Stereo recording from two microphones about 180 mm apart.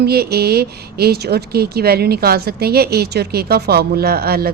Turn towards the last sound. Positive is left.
turn(degrees=-60)  # may be behind; listen again after turning